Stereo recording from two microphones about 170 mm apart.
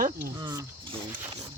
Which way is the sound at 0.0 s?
50° right (ahead or behind).